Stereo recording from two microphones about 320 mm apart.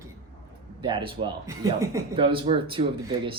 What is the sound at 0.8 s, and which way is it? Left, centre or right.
Speech, centre.